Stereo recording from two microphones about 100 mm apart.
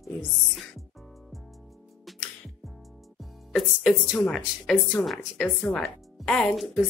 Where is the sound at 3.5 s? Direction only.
Centre (ahead or behind).